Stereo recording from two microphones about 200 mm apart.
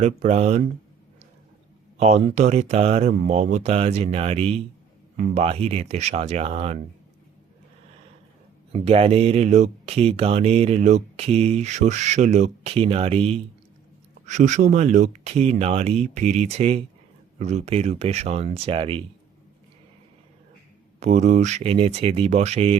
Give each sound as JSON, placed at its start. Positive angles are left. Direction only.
{"t": 0.0, "sound": "speech", "side_deg": -35}
{"t": 2.0, "sound": "speech", "side_deg": -35}
{"t": 8.7, "sound": "speech", "side_deg": -30}
{"t": 21.0, "sound": "speech", "side_deg": -35}